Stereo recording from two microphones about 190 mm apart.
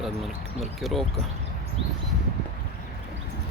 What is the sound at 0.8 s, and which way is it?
Speech, centre (ahead or behind).